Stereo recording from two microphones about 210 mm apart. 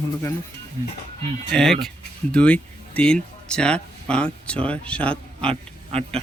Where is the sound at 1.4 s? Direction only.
Centre (ahead or behind).